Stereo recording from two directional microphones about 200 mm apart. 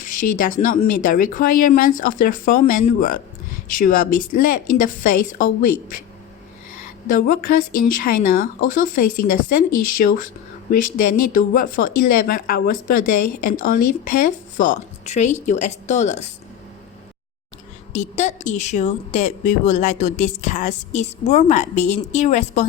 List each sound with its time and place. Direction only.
0.3 s a woman's voice: 40° left (ahead or behind)
7.1 s a woman's voice: 45° left (ahead or behind)
17.9 s a woman's voice: 35° left (ahead or behind)